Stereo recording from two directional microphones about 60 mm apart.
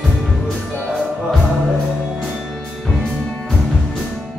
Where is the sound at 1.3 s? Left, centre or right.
Centre.